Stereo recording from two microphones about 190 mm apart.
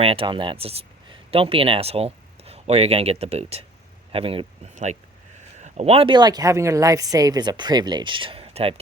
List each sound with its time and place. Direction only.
0.0 s speech: 30° right (ahead or behind)